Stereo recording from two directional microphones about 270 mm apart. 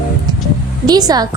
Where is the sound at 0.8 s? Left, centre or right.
Centre.